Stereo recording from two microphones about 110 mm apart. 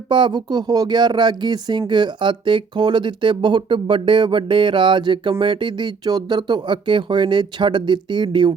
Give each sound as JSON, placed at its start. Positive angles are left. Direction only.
{"t": 0.1, "sound": "speech", "side_deg": -45}